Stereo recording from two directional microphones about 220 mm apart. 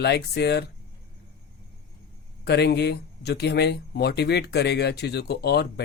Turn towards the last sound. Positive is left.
turn(degrees=50)  # may be behind; listen again after turning